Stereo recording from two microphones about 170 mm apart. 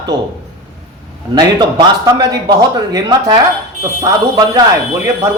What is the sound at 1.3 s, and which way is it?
A man's voice, 25° right (ahead or behind).